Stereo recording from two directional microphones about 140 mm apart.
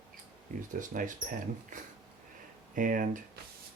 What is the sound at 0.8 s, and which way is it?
Speech, 70° right (ahead or behind).